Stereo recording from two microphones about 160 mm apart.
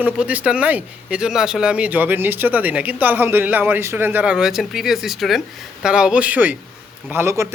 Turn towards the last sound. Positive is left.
turn(degrees=-15)  # may be behind; listen again after turning